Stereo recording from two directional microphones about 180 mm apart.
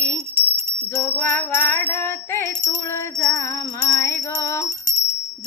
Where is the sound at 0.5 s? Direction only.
15° right (ahead or behind).